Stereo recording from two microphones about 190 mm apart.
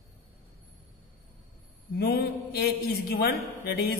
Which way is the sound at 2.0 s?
55° left (ahead or behind).